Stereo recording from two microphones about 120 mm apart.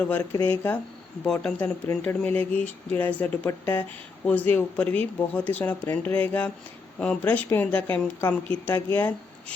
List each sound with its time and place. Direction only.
0.4 s speech: 20° left (ahead or behind)